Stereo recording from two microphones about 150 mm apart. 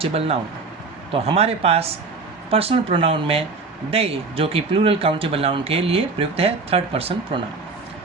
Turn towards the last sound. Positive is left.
turn(degrees=-40)  # may be behind; listen again after turning